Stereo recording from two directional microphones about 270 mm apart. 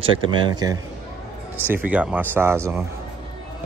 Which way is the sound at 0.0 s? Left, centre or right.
Centre.